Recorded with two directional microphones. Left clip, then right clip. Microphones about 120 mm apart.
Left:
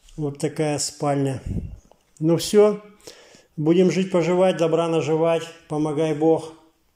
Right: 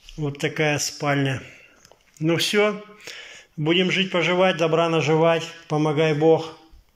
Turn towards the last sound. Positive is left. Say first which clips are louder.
# right 2 dB
turn(degrees=20)  # may be behind; listen again after turning